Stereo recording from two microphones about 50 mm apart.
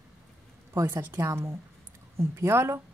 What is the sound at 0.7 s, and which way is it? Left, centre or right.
Speech, right.